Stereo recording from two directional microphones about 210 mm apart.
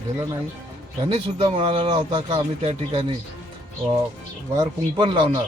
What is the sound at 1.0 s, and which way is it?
Speech, 25° right (ahead or behind).